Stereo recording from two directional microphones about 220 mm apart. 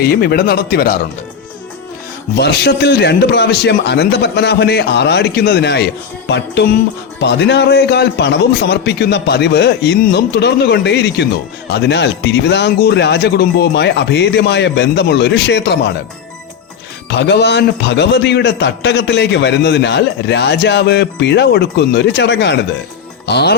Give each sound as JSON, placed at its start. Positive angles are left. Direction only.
{"t": 0.0, "sound": "a man's voice", "side_deg": 45}
{"t": 2.4, "sound": "a man's voice", "side_deg": 50}
{"t": 17.1, "sound": "a man's voice", "side_deg": 50}
{"t": 23.2, "sound": "music", "side_deg": 50}